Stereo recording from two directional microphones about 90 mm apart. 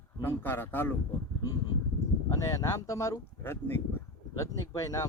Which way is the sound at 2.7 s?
35° left (ahead or behind).